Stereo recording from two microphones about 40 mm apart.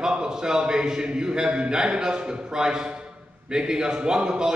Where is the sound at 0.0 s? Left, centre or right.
Right.